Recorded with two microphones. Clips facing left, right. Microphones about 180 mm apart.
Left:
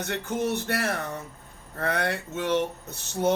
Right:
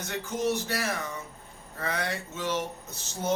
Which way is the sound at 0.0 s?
60° left (ahead or behind).